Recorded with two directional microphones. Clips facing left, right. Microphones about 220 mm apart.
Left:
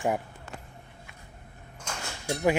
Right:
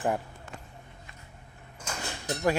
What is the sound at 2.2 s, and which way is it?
Speech, 10° left (ahead or behind).